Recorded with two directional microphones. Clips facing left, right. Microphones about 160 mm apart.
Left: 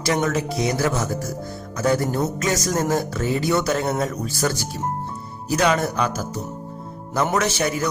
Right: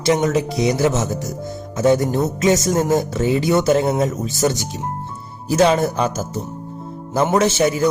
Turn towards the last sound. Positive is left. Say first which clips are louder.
# right 6 dB
turn(degrees=-25)  # may be behind; listen again after turning